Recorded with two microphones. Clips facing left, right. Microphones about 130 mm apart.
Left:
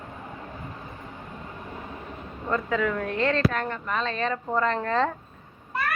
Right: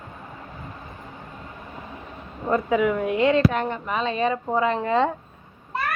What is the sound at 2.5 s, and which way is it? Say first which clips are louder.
Speech: right 5 dB; 20° right (ahead or behind).